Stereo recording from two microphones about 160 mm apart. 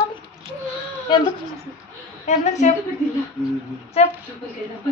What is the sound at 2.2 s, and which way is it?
Speech, 45° left (ahead or behind).